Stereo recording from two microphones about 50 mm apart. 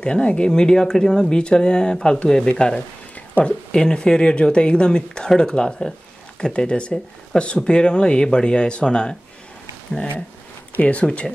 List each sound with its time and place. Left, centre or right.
0.0 s speech: left
10.8 s speech: left